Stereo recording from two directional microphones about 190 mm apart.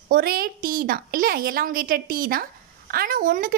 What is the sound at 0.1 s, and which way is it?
A woman's voice, 50° right (ahead or behind).